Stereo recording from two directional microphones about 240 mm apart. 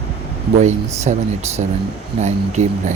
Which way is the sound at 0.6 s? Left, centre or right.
Right.